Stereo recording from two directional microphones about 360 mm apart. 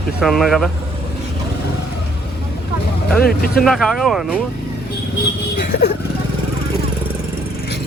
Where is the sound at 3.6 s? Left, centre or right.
Centre.